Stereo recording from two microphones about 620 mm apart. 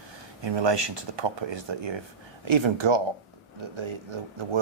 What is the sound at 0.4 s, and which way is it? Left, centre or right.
Speech, right.